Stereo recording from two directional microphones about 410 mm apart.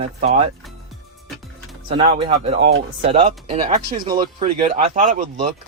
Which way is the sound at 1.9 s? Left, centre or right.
Centre.